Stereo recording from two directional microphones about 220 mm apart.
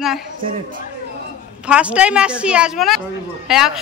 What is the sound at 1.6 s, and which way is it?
A woman's voice, 5° right (ahead or behind).